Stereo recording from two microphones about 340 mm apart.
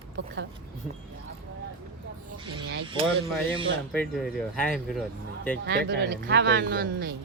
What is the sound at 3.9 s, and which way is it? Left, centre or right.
Speech, centre.